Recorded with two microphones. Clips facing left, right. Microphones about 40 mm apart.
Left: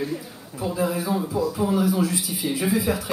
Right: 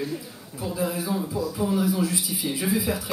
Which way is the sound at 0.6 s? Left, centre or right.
Centre.